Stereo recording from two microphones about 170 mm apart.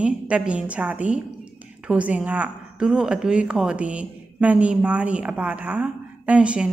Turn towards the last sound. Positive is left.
turn(degrees=-5)  # may be behind; listen again after turning